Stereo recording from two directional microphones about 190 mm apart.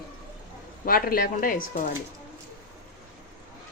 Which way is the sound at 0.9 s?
50° left (ahead or behind).